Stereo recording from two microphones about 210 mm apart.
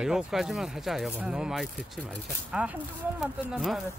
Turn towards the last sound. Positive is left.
turn(degrees=0)  # may be behind; listen again after turning